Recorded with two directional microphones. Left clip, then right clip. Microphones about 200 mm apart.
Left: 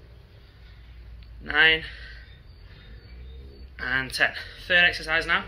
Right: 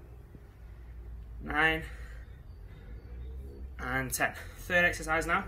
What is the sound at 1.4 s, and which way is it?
Speech, 5° right (ahead or behind).